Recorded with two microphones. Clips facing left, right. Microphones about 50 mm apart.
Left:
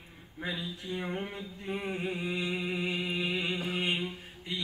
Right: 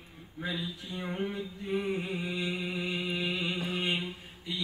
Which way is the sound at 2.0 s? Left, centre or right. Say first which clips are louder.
Left 1 dB; left.